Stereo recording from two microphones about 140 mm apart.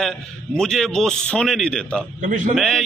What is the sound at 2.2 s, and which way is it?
Speech, 65° right (ahead or behind).